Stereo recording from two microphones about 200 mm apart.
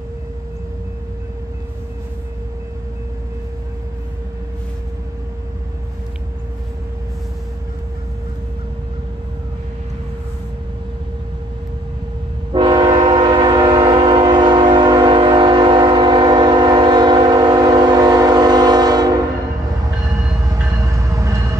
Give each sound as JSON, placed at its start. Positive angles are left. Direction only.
{"t": 12.5, "sound": "train", "side_deg": -20}
{"t": 20.9, "sound": "train", "side_deg": -15}